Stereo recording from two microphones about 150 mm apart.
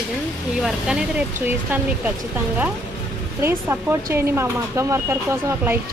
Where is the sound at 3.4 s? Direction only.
15° right (ahead or behind).